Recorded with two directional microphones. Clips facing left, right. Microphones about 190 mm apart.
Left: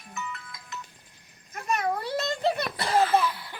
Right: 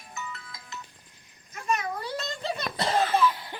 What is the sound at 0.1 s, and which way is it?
Music, 30° right (ahead or behind).